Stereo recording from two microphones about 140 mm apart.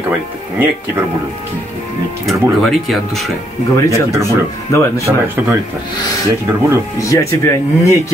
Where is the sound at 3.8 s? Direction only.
25° left (ahead or behind).